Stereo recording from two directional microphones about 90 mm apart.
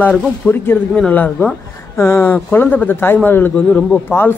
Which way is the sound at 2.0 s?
30° left (ahead or behind).